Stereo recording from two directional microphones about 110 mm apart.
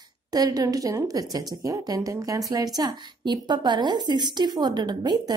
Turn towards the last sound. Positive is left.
turn(degrees=-40)  # may be behind; listen again after turning